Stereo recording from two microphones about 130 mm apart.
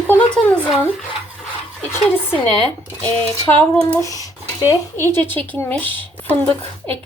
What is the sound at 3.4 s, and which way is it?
Speech, 10° left (ahead or behind).